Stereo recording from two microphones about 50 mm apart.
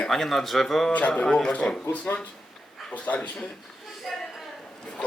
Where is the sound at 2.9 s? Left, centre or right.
Left.